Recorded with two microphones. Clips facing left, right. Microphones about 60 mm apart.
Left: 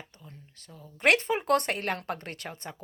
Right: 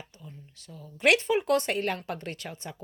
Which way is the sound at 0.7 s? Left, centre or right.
Left.